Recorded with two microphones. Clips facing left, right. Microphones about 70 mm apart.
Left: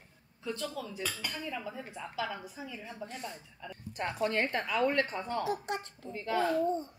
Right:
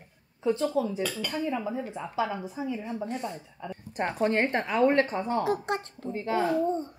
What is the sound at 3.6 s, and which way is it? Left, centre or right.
Speech, right.